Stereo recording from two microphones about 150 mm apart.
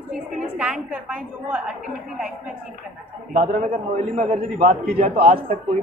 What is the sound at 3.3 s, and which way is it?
Speech, 60° right (ahead or behind).